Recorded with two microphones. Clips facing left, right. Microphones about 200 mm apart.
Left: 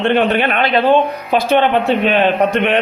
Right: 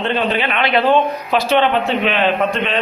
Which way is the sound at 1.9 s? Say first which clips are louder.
Left 3 dB; 40° left (ahead or behind).